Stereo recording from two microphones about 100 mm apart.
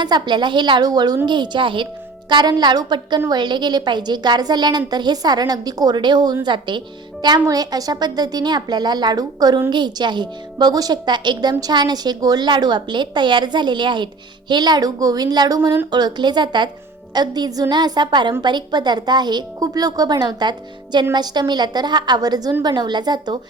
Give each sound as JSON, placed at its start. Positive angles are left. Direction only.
{"t": 0.0, "sound": "a woman's voice", "side_deg": -45}